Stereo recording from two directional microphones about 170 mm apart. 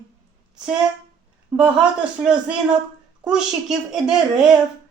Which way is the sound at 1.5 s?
5° right (ahead or behind).